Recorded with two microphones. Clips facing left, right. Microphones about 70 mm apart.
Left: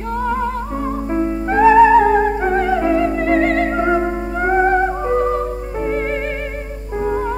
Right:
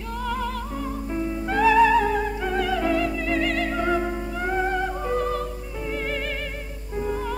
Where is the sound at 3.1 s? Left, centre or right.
Left.